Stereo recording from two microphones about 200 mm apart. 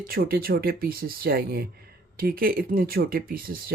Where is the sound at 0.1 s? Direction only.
50° right (ahead or behind).